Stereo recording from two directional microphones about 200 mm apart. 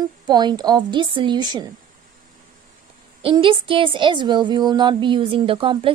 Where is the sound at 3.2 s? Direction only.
25° right (ahead or behind).